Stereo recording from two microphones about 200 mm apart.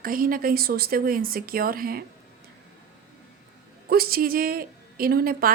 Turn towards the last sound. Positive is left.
turn(degrees=-50)  # may be behind; listen again after turning